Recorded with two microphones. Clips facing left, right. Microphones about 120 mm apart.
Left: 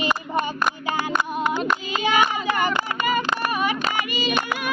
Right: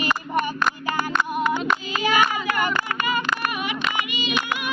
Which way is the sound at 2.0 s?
20° left (ahead or behind).